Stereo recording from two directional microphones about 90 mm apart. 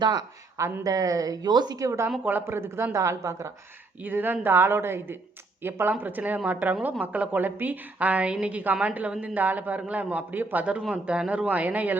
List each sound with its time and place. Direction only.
0.0 s speech: 50° right (ahead or behind)
0.5 s a woman's voice: 35° right (ahead or behind)
2.2 s speech: 25° right (ahead or behind)
4.0 s a woman's voice: 20° right (ahead or behind)